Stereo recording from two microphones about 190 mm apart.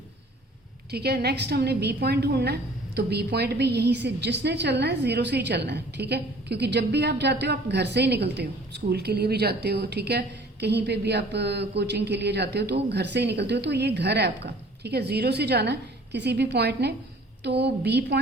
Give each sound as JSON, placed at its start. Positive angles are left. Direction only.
{"t": 0.9, "sound": "a woman's voice", "side_deg": -55}